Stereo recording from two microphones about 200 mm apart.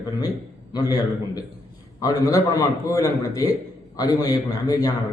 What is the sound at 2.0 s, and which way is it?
A man's voice, 15° left (ahead or behind).